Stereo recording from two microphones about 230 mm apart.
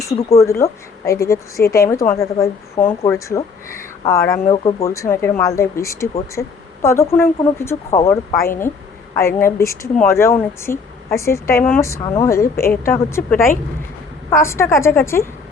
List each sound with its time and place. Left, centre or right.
0.4 s a woman's voice: centre